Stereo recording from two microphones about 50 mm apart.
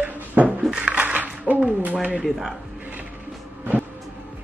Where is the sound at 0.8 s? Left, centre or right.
Right.